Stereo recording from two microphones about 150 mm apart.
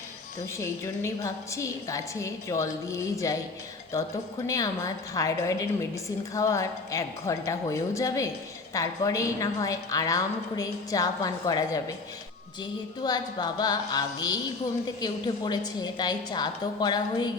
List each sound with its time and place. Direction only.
0.6 s a woman's voice: 20° left (ahead or behind)
13.0 s a woman's voice: 30° left (ahead or behind)